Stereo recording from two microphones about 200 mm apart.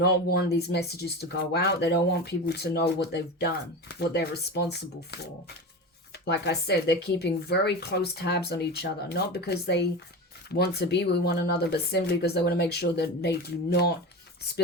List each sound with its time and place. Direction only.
0.0 s speech: 50° left (ahead or behind)
6.3 s speech: 55° left (ahead or behind)